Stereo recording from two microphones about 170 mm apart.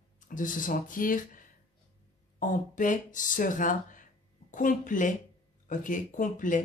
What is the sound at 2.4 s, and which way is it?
Speech, 50° left (ahead or behind).